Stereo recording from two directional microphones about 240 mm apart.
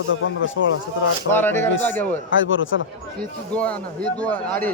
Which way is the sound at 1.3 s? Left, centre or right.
Centre.